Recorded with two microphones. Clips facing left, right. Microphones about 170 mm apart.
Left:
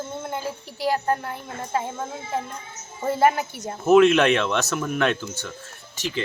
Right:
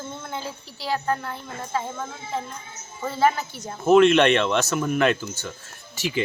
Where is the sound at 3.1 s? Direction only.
50° left (ahead or behind).